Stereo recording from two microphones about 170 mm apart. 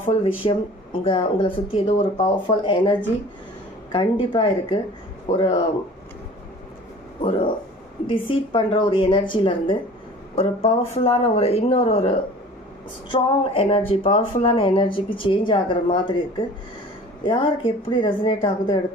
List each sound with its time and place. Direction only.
0.0 s speech: 30° left (ahead or behind)
7.2 s speech: 30° left (ahead or behind)
17.3 s speech: 30° left (ahead or behind)